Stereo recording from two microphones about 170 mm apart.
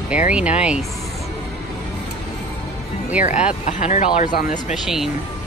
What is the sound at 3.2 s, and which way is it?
Speech, 45° left (ahead or behind).